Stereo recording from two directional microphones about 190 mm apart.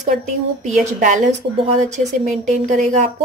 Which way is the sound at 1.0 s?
40° right (ahead or behind).